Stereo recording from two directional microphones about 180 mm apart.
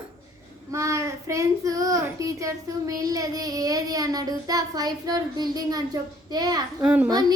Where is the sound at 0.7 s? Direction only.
15° right (ahead or behind).